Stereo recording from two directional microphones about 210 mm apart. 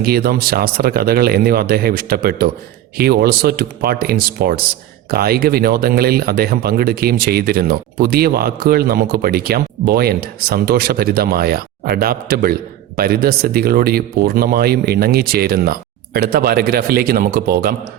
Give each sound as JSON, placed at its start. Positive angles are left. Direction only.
{"t": 0.0, "sound": "speech", "side_deg": -45}